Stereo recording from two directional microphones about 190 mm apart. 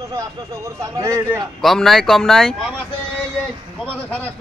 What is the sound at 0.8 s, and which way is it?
Speech, 15° right (ahead or behind).